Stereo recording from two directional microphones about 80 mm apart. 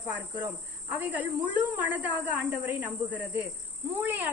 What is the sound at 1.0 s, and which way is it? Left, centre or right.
Speech, right.